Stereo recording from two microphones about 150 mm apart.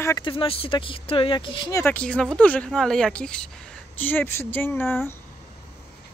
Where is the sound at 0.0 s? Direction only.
25° left (ahead or behind).